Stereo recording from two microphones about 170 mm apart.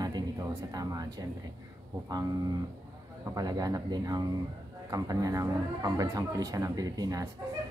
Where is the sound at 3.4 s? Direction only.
20° right (ahead or behind).